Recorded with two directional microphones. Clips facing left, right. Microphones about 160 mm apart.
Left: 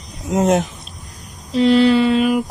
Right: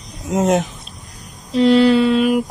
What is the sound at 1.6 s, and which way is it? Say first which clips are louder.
Mantra: right 1 dB; 45° right (ahead or behind).